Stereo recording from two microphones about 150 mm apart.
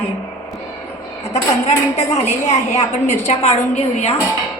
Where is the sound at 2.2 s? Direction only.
50° left (ahead or behind).